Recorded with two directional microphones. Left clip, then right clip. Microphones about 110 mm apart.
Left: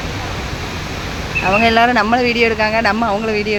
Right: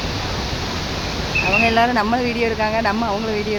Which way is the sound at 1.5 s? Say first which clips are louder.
Left 5 dB; 30° left (ahead or behind).